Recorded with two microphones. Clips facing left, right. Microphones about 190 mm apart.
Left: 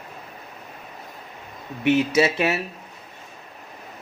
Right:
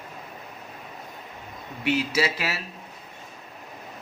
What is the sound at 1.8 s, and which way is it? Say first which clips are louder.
Speech: left 6 dB; 25° left (ahead or behind).